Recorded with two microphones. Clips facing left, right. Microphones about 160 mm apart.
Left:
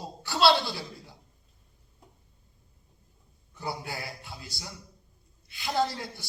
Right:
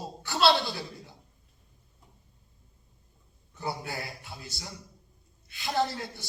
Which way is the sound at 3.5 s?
20° right (ahead or behind).